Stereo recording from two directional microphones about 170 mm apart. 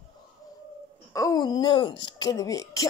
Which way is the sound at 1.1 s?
20° left (ahead or behind).